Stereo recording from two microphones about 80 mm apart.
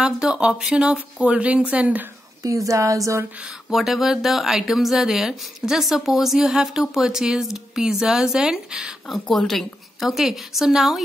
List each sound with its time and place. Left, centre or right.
0.0 s speech: centre
2.4 s a sound: right
3.7 s speech: centre